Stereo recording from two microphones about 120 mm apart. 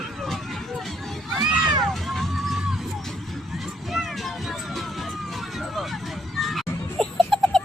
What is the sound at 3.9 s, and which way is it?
Music, centre (ahead or behind).